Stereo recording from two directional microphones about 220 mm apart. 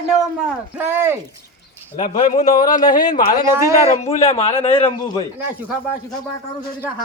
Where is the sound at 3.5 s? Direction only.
10° right (ahead or behind).